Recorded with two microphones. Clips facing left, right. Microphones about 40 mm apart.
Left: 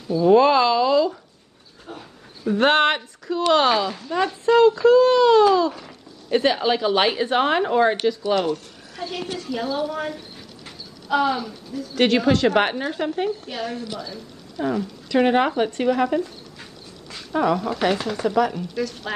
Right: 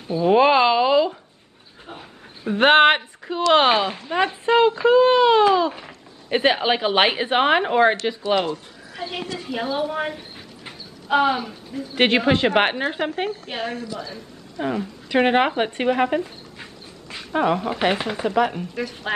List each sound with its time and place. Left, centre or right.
0.1 s speech: right
1.9 s a sound: right
3.5 s a woman's voice: right